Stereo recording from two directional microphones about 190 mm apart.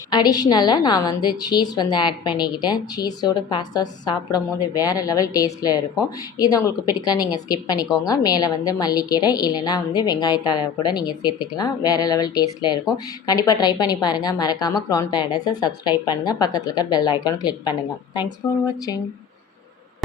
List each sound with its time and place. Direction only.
0.1 s a woman's voice: 20° left (ahead or behind)